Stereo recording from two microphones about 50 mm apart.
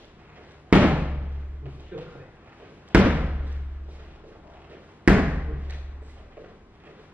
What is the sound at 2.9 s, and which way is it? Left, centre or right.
Slam, right.